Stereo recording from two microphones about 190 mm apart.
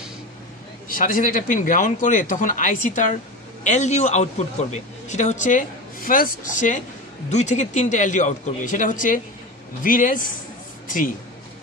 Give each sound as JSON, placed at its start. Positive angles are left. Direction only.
{"t": 0.8, "sound": "speech", "side_deg": 45}